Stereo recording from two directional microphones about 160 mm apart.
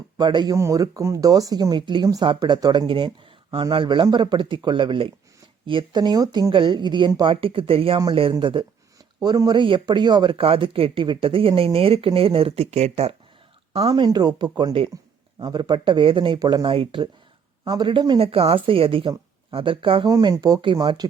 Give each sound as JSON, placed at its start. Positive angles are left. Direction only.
{"t": 0.2, "sound": "speech", "side_deg": -30}
{"t": 20.1, "sound": "speech", "side_deg": -20}